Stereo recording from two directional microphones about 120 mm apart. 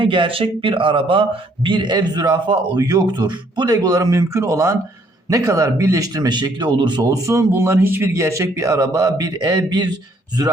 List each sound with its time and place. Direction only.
0.0 s a man's voice: 45° right (ahead or behind)